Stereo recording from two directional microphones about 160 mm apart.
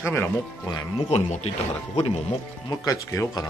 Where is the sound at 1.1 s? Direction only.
45° left (ahead or behind).